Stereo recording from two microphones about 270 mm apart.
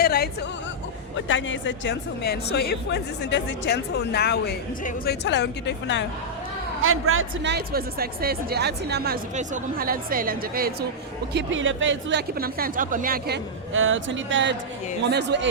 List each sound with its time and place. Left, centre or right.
0.0 s speech: left
1.1 s a woman's voice: left
6.8 s speech: right